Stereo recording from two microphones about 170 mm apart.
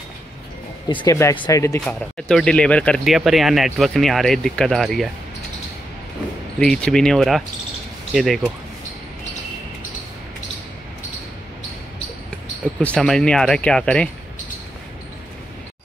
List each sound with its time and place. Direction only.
0.8 s speech: 25° left (ahead or behind)
1.3 s speech: 30° left (ahead or behind)
1.6 s speech: 15° left (ahead or behind)
2.2 s speech: 5° left (ahead or behind)
6.6 s speech: 5° left (ahead or behind)
12.8 s speech: 5° left (ahead or behind)